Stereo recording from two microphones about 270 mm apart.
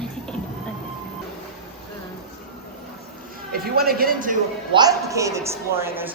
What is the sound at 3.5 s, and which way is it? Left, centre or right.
Speech, right.